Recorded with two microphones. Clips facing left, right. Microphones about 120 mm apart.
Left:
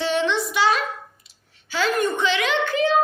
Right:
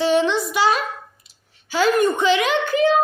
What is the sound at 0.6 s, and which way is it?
Speech, 40° right (ahead or behind).